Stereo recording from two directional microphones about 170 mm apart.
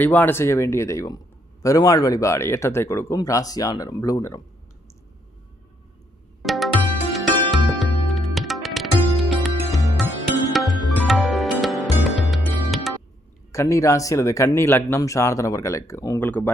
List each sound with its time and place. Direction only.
0.0 s speech: 10° left (ahead or behind)
6.4 s music: centre (ahead or behind)
13.5 s speech: 15° left (ahead or behind)